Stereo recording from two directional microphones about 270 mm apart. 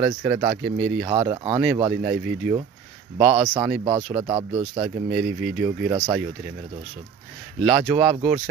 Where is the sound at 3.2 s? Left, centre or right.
Centre.